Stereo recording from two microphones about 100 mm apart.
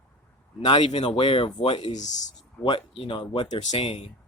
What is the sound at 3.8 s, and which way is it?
Speech, 85° left.